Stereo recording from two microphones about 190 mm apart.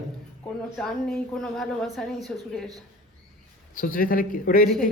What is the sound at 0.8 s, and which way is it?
A woman's voice, centre (ahead or behind).